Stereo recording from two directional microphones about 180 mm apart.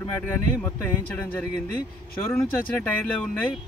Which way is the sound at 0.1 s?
10° left (ahead or behind).